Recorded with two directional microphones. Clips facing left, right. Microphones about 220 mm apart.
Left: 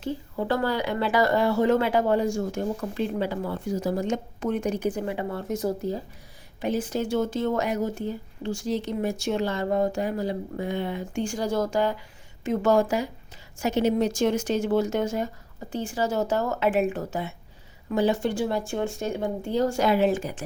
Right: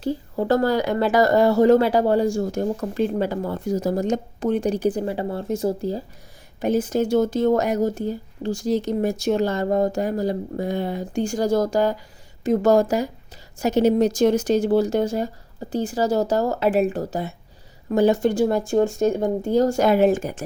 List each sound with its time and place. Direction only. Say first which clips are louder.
0.0 s speech: right 5 dB; 40° right (ahead or behind)
6.6 s speech: right 6 dB; 45° right (ahead or behind)